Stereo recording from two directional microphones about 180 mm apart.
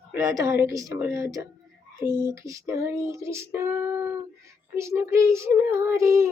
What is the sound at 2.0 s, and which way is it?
Speech, 15° right (ahead or behind).